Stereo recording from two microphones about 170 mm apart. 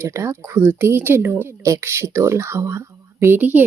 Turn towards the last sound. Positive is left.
turn(degrees=-10)  # may be behind; listen again after turning